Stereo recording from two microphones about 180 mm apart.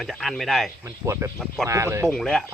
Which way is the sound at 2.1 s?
5° left (ahead or behind).